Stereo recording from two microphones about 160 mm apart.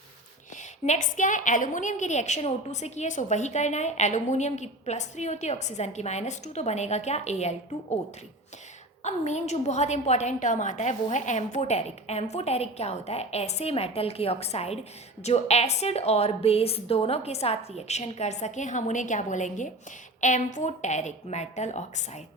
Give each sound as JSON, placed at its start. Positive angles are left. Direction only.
{"t": 0.5, "sound": "a woman's voice", "side_deg": 50}
{"t": 9.0, "sound": "a woman's voice", "side_deg": 45}